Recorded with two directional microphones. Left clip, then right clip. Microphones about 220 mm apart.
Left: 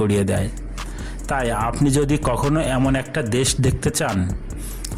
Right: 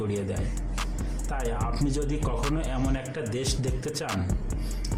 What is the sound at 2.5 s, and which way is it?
Speech, 40° left (ahead or behind).